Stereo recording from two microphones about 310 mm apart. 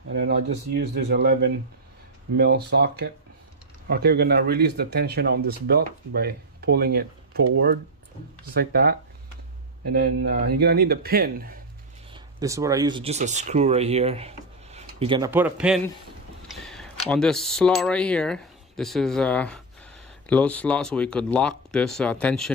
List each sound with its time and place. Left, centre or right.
0.1 s a man's voice: right
12.1 s speech: centre